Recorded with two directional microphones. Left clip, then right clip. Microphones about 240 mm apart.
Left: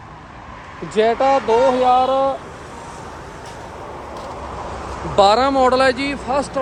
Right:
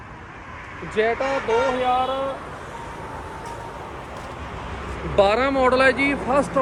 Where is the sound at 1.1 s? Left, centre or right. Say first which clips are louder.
Left 7 dB; left.